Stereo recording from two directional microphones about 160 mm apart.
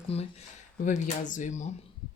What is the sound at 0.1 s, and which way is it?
Speech, 40° left (ahead or behind).